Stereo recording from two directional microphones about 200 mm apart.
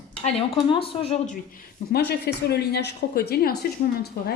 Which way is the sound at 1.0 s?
30° left (ahead or behind).